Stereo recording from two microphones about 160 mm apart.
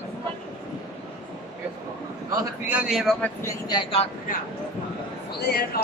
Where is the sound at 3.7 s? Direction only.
30° left (ahead or behind).